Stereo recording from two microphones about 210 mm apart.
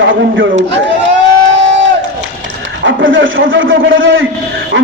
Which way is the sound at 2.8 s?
65° right (ahead or behind).